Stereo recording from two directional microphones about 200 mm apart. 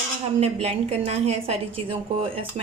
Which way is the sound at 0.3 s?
30° right (ahead or behind).